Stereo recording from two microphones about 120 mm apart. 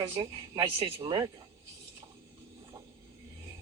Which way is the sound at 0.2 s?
40° right (ahead or behind).